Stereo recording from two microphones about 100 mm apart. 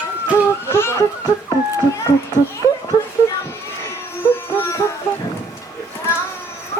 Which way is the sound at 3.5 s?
25° left (ahead or behind).